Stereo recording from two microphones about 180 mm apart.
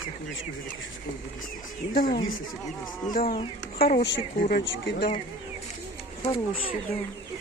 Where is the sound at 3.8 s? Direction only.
50° left (ahead or behind).